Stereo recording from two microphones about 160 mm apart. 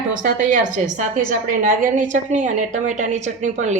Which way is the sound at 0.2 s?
55° right (ahead or behind).